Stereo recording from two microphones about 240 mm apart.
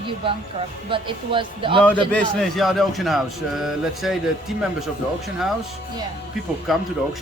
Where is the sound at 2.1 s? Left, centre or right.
Centre.